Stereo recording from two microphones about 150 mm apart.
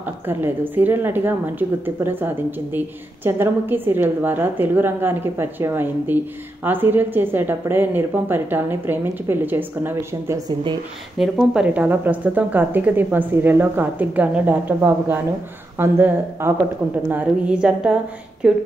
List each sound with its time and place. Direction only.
0.0 s speech: 15° right (ahead or behind)
11.1 s speech: 5° right (ahead or behind)